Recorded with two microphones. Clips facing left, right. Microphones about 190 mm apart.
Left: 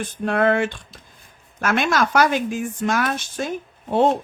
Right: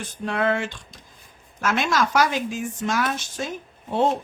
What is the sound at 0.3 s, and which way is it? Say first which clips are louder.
Speech: left 5 dB; 55° left (ahead or behind).